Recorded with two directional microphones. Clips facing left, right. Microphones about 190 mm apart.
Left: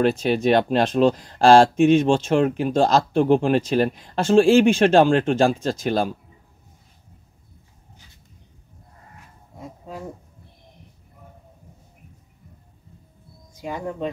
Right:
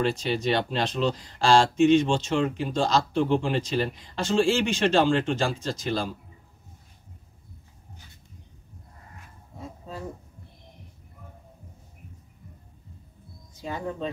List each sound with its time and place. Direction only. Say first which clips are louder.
0.0 s speech: left 6 dB; 55° left (ahead or behind)
9.6 s a sound: left 2 dB; 10° left (ahead or behind)
13.6 s speech: left 3 dB; 15° left (ahead or behind)